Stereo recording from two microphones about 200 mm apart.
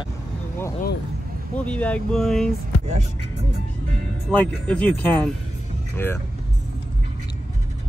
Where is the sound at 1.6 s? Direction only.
5° left (ahead or behind).